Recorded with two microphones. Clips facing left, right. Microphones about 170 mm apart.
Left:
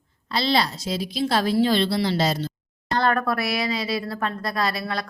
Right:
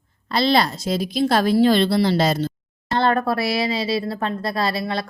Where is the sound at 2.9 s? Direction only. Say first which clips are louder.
Right 3 dB; 30° right (ahead or behind).